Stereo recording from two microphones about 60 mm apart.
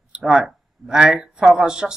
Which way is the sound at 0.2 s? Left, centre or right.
Centre.